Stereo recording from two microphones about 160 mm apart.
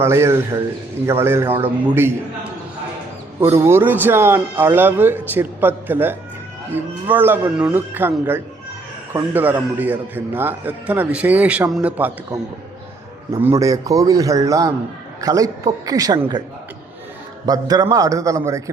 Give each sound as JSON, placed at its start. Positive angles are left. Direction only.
{"t": 0.0, "sound": "a man's voice", "side_deg": -15}
{"t": 13.4, "sound": "a man's voice", "side_deg": -20}
{"t": 17.4, "sound": "a man's voice", "side_deg": -25}